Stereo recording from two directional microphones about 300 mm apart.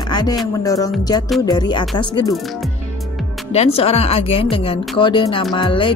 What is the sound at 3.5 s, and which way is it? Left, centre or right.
Speech, centre.